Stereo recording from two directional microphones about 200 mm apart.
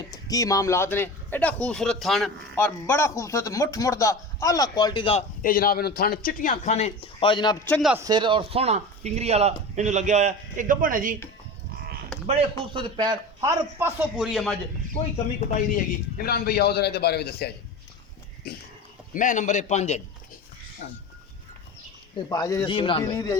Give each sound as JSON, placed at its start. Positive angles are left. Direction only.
{"t": 0.1, "sound": "speech", "side_deg": 15}
{"t": 5.4, "sound": "a man's voice", "side_deg": 45}
{"t": 7.7, "sound": "a man's voice", "side_deg": 0}
{"t": 7.9, "sound": "speech", "side_deg": -20}
{"t": 12.7, "sound": "a man's voice", "side_deg": -20}
{"t": 14.9, "sound": "a man's voice", "side_deg": 35}
{"t": 19.1, "sound": "speech", "side_deg": 40}
{"t": 20.8, "sound": "speech", "side_deg": 55}
{"t": 22.3, "sound": "speech", "side_deg": 20}